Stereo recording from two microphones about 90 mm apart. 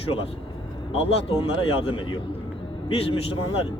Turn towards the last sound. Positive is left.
turn(degrees=90)